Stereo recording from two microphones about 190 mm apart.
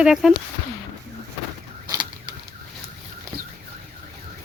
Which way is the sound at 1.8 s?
20° right (ahead or behind).